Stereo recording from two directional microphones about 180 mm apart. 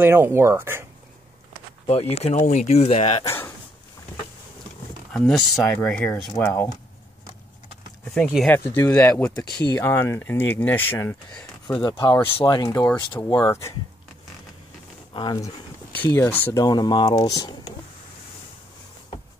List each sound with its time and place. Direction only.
0.0 s speech: 15° right (ahead or behind)
1.9 s speech: 35° left (ahead or behind)
3.3 s a sound: 10° left (ahead or behind)
5.1 s speech: centre (ahead or behind)
8.1 s speech: centre (ahead or behind)
12.0 s speech: 30° left (ahead or behind)
12.6 s speech: 10° left (ahead or behind)
15.1 s speech: 20° left (ahead or behind)
16.6 s speech: 20° left (ahead or behind)